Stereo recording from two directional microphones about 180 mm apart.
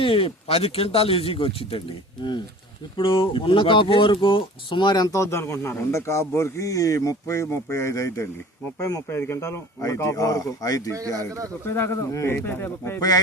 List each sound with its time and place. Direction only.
0.0 s speech: 30° left (ahead or behind)